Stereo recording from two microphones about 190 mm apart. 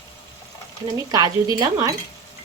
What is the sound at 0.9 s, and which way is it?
Speech, 20° right (ahead or behind).